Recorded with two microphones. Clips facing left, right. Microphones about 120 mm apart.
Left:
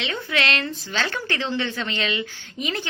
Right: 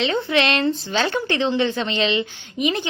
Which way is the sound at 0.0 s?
30° right (ahead or behind).